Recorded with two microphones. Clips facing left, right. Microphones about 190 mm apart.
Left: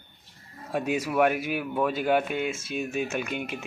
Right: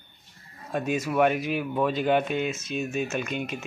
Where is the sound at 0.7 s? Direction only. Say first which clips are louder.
Even; 10° left (ahead or behind).